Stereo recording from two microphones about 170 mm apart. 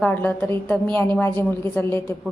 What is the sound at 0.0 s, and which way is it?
A woman's voice, 10° left (ahead or behind).